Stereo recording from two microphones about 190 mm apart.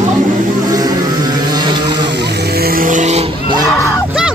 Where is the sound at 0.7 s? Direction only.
20° right (ahead or behind).